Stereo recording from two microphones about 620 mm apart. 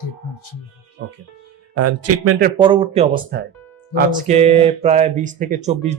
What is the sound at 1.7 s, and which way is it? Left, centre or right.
Speech, right.